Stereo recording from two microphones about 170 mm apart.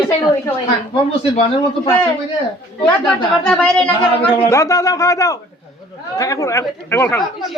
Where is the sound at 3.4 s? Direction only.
5° left (ahead or behind).